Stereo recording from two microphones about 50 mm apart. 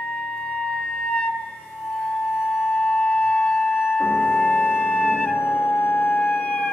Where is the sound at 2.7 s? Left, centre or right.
Centre.